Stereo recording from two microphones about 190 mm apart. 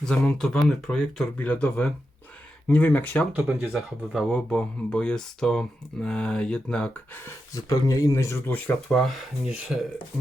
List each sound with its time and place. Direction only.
0.0 s speech: centre (ahead or behind)
7.5 s speech: 15° left (ahead or behind); by 9.9 s 5° right (ahead or behind)